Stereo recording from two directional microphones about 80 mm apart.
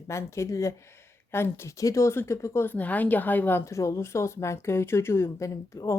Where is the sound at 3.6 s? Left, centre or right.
Left.